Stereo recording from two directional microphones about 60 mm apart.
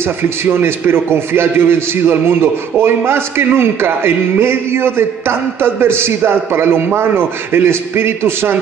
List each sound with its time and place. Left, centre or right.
0.0 s a man's voice: right